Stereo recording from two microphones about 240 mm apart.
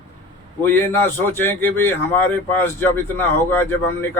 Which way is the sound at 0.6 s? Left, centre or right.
Centre.